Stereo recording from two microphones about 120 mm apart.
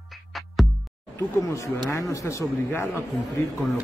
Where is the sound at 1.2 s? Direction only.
25° left (ahead or behind).